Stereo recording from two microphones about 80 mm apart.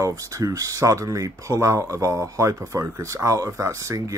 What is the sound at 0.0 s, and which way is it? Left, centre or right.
Speech, right.